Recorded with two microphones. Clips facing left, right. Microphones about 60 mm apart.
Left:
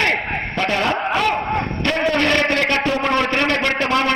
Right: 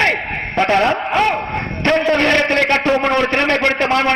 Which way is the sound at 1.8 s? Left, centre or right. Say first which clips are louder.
Right 6 dB; right.